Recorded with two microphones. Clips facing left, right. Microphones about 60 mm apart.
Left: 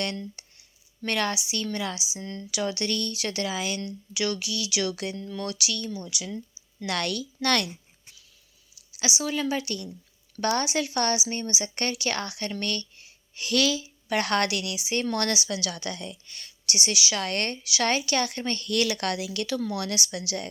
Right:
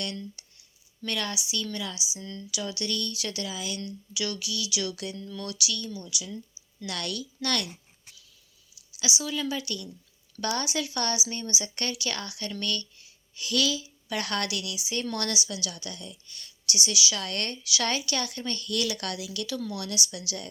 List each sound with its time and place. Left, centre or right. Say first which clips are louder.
1.0 s a woman's voice: left 5 dB; left
3.8 s a woman's voice: left 3 dB; left
6.8 s a woman's voice: left 5 dB; left
8.9 s a woman's voice: left 3 dB; left